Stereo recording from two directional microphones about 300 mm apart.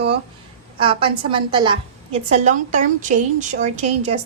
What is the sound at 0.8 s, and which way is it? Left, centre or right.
A woman's voice, centre.